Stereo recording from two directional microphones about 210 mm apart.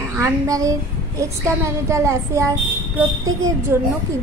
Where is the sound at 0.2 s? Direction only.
15° right (ahead or behind).